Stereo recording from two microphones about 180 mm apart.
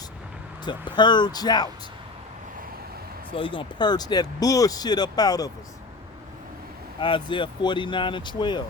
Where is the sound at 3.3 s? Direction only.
30° left (ahead or behind).